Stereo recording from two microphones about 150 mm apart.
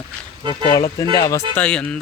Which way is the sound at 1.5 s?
5° left (ahead or behind).